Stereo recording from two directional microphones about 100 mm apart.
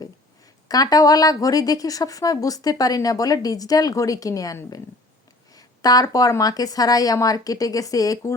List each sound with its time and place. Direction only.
0.7 s speech: 40° left (ahead or behind)
5.5 s speech: 40° left (ahead or behind)